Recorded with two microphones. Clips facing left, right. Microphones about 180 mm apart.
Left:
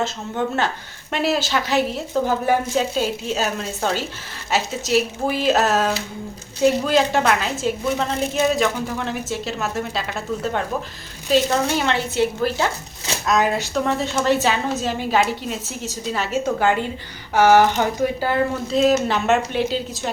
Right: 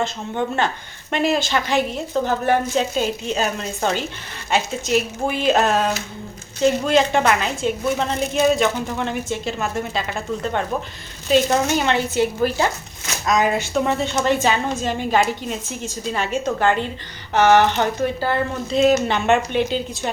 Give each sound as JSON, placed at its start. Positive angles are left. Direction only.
{"t": 0.0, "sound": "a woman's voice", "side_deg": 0}